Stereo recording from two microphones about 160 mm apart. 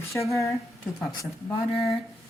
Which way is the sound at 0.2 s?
20° left (ahead or behind).